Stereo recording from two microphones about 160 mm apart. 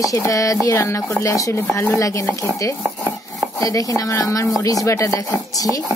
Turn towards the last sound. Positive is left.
turn(degrees=20)  # may be behind; listen again after turning